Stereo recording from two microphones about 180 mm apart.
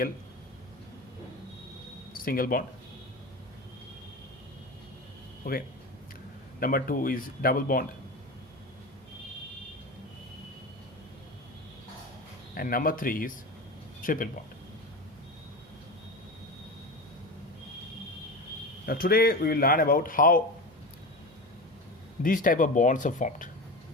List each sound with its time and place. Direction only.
2.1 s speech: 55° left (ahead or behind)
5.5 s speech: 50° left (ahead or behind)
12.5 s speech: 50° left (ahead or behind)
18.9 s speech: 55° left (ahead or behind)
22.2 s speech: 50° left (ahead or behind)